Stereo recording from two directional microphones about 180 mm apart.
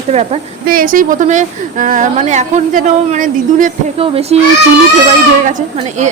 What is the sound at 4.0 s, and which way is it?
Speech, 35° right (ahead or behind).